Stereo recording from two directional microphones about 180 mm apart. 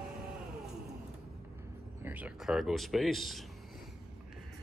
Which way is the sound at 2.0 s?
10° right (ahead or behind).